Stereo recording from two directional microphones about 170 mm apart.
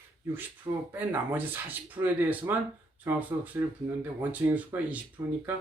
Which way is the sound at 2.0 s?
10° right (ahead or behind).